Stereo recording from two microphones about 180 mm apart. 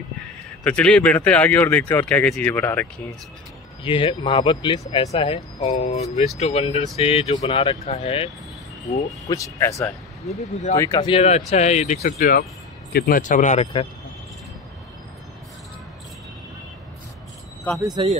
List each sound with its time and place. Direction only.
0.7 s speech: 5° left (ahead or behind)
3.8 s speech: 30° left (ahead or behind)
5.1 s speech: 35° left (ahead or behind)
9.3 s speech: 15° left (ahead or behind)
10.2 s speech: 40° left (ahead or behind)
10.8 s speech: 20° left (ahead or behind)
11.1 s speech: 35° left (ahead or behind)
12.2 s speech: 55° left (ahead or behind)
17.7 s speech: 20° right (ahead or behind)